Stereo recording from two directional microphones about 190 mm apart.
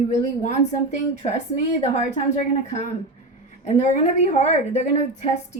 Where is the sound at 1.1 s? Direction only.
35° left (ahead or behind).